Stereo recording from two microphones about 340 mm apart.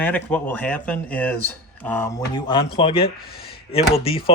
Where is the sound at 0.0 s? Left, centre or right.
Centre.